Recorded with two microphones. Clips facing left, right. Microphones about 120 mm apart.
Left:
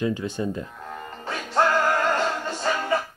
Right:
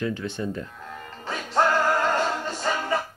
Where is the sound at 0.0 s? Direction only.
15° left (ahead or behind).